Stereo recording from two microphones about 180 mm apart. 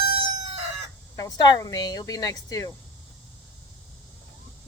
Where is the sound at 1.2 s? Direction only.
20° left (ahead or behind).